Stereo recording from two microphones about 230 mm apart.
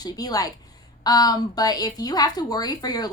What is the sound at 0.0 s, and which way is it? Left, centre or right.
Speech, centre.